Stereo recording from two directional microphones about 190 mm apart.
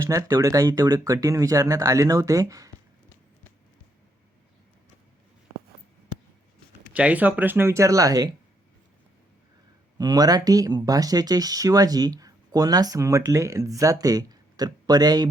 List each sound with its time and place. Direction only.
0.0 s speech: 15° right (ahead or behind)
6.9 s speech: 10° right (ahead or behind)
10.0 s speech: 20° right (ahead or behind)